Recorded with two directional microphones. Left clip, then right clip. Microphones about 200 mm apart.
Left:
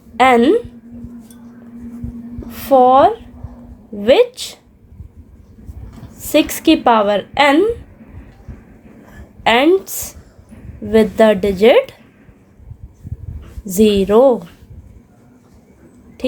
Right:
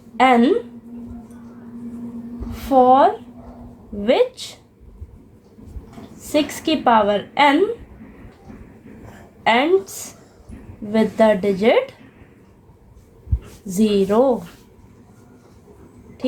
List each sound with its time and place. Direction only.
0.2 s a woman's voice: 45° left (ahead or behind)
2.5 s a woman's voice: 50° left (ahead or behind)
6.3 s a woman's voice: 45° left (ahead or behind)
9.4 s a woman's voice: 45° left (ahead or behind)
13.7 s a woman's voice: 45° left (ahead or behind)